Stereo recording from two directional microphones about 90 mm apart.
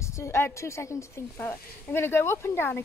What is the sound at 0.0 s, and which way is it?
Speech, 35° left (ahead or behind).